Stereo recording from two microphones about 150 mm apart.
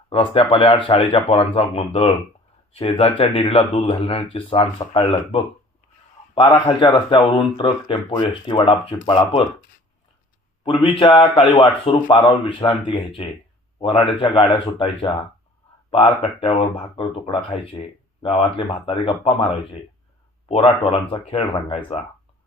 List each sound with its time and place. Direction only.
0.1 s speech: 35° left (ahead or behind)
6.4 s speech: 30° left (ahead or behind)
10.6 s speech: 40° left (ahead or behind)
16.4 s speech: 35° left (ahead or behind)